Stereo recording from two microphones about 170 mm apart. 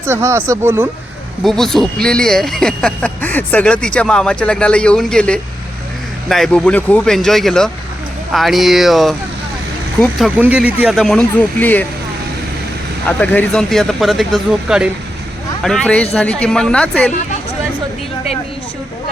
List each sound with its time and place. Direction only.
0.0 s speech: 15° right (ahead or behind)
1.5 s speech: centre (ahead or behind)
13.1 s speech: 5° left (ahead or behind)